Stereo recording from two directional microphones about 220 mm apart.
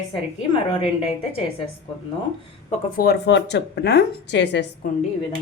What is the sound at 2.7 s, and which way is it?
A woman's voice, 40° left (ahead or behind).